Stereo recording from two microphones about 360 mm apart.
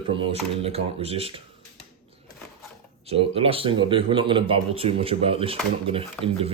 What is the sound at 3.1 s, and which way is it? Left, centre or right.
Speech, centre.